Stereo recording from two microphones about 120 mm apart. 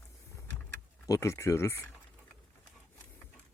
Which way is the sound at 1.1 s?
25° left (ahead or behind).